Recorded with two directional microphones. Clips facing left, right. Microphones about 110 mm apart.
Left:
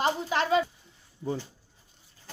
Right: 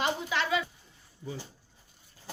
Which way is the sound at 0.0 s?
40° left (ahead or behind).